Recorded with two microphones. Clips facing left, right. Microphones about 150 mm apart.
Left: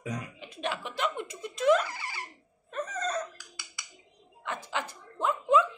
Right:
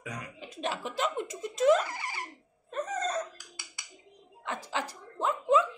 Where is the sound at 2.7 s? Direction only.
25° right (ahead or behind).